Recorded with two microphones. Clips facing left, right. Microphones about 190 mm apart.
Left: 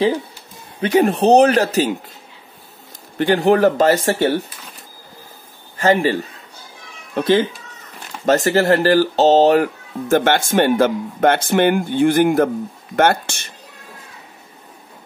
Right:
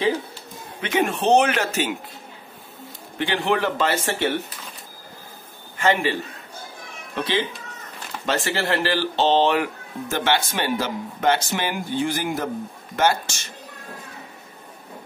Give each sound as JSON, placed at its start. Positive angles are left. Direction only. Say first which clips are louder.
{"t": 0.7, "sound": "speech", "louder": "left 8 dB", "side_deg": 35}
{"t": 3.2, "sound": "speech", "louder": "left 9 dB", "side_deg": 40}
{"t": 5.8, "sound": "a man's voice", "louder": "left 5 dB", "side_deg": 40}
{"t": 7.2, "sound": "speech", "louder": "left 9 dB", "side_deg": 45}